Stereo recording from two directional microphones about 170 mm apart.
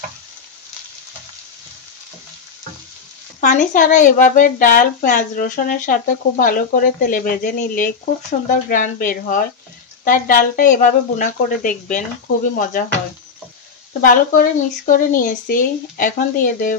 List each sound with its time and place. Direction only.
3.3 s a woman's voice: 50° left (ahead or behind)
14.0 s a woman's voice: 55° left (ahead or behind)